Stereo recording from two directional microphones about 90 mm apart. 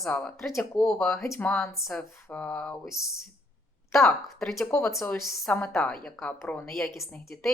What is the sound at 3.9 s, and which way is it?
Speech, 5° left (ahead or behind).